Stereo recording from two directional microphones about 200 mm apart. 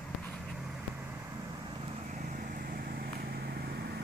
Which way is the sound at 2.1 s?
40° right (ahead or behind).